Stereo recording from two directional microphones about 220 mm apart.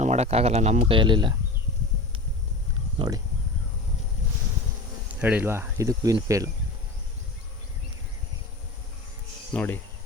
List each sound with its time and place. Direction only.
0.0 s speech: 30° right (ahead or behind)
5.2 s speech: 5° right (ahead or behind)
9.5 s speech: 10° left (ahead or behind)